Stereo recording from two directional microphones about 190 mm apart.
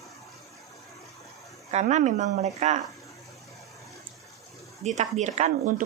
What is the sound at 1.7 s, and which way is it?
A woman's voice, 40° right (ahead or behind).